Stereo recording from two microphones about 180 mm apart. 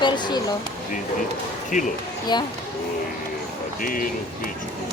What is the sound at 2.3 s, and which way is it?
Speech, 25° left (ahead or behind).